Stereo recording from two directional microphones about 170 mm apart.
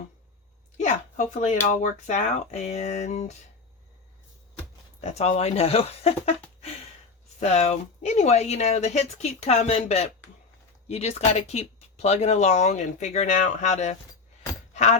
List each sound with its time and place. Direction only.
0.8 s speech: 45° left (ahead or behind)
4.9 s speech: 40° left (ahead or behind)
7.3 s speech: 40° left (ahead or behind)
14.7 s keys jangling: 40° left (ahead or behind)